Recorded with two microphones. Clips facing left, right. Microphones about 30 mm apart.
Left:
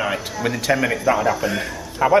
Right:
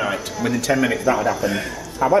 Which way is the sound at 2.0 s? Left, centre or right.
Left.